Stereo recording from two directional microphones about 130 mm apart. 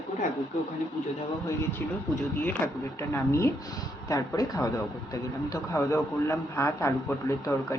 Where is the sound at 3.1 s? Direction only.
20° left (ahead or behind).